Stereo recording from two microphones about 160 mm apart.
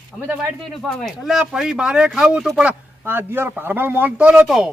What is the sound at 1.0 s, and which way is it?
Speech, 5° right (ahead or behind).